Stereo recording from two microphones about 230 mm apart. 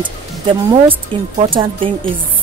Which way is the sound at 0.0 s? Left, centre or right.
Right.